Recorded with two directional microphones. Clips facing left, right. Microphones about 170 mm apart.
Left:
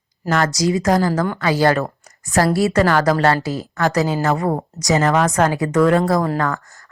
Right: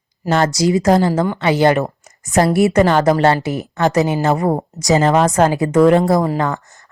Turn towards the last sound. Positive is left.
turn(degrees=-20)  # may be behind; listen again after turning